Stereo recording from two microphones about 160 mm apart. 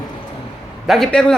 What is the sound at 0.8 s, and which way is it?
Speech, centre (ahead or behind).